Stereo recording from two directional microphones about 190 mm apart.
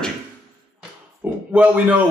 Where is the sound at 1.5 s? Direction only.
5° right (ahead or behind).